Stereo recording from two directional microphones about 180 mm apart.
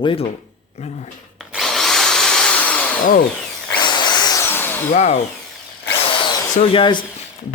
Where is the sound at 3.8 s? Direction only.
25° left (ahead or behind).